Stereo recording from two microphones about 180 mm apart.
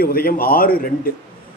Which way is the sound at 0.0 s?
55° left (ahead or behind).